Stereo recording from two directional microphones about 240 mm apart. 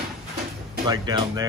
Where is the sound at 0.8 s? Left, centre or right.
Centre.